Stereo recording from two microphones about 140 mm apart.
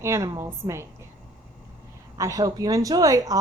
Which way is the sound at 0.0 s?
20° right (ahead or behind).